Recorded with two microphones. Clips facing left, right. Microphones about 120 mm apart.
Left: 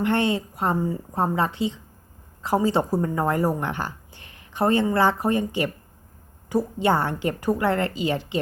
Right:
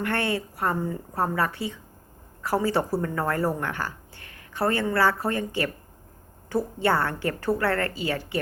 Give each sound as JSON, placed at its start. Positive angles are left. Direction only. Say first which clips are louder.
{"t": 0.0, "sound": "a woman's voice", "louder": "left 4 dB", "side_deg": 20}